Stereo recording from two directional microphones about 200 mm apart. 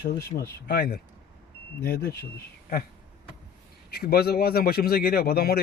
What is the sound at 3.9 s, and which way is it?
Speech, 50° left (ahead or behind).